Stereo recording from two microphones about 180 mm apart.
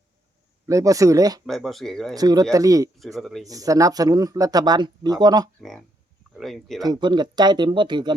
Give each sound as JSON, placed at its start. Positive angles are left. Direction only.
{"t": 0.7, "sound": "speech", "side_deg": -20}
{"t": 1.5, "sound": "speech", "side_deg": 0}
{"t": 2.1, "sound": "speech", "side_deg": -20}
{"t": 3.0, "sound": "speech", "side_deg": 0}
{"t": 3.4, "sound": "speech", "side_deg": -20}
{"t": 5.5, "sound": "speech", "side_deg": 0}
{"t": 6.8, "sound": "speech", "side_deg": -25}